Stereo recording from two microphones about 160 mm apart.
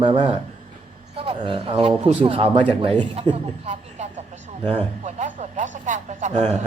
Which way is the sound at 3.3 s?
45° right (ahead or behind).